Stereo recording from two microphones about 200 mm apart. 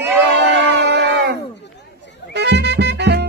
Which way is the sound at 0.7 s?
60° right (ahead or behind).